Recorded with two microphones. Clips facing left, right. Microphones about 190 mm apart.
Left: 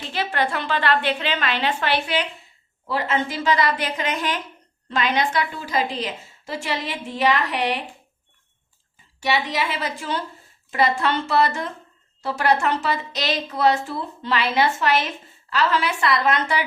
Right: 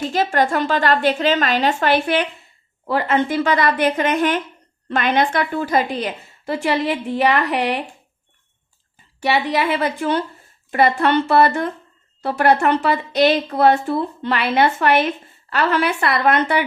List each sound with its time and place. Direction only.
0.0 s a woman's voice: 45° right (ahead or behind)
9.2 s speech: 60° right (ahead or behind)